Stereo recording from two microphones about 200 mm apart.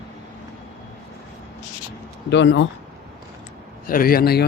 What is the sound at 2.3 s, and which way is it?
Speech, 65° left (ahead or behind).